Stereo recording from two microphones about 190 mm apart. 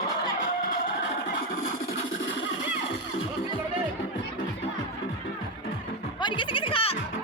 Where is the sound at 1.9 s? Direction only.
75° left (ahead or behind).